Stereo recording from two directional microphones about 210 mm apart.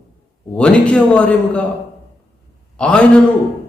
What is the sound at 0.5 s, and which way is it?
A man's voice, 5° left (ahead or behind).